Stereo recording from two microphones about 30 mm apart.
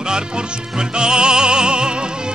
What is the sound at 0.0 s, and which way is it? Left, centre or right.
Music, right.